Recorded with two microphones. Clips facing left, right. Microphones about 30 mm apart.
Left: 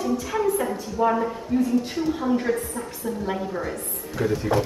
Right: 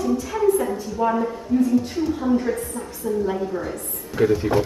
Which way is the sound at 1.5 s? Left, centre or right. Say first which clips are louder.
Right 3 dB; left.